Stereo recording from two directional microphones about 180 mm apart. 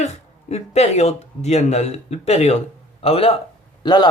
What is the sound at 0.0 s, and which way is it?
Speech, 35° left (ahead or behind).